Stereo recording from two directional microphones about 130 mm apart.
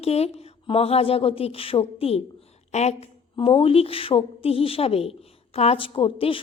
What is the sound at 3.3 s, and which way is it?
A woman's voice, 45° left (ahead or behind).